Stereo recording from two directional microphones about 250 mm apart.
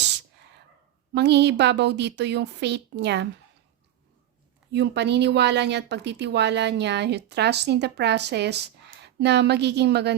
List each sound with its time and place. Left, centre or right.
1.1 s a woman's voice: right
4.7 s a woman's voice: right